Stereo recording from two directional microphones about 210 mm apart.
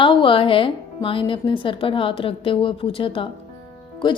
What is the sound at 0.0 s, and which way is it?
Speech, 25° left (ahead or behind).